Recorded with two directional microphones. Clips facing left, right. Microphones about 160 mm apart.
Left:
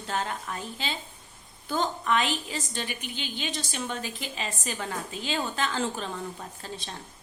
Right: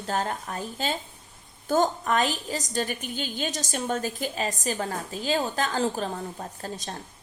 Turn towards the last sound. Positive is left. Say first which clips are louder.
# right 4 dB
turn(degrees=-45)  # may be behind; listen again after turning